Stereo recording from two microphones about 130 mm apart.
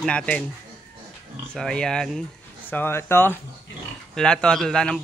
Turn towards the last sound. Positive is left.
turn(degrees=5)  # may be behind; listen again after turning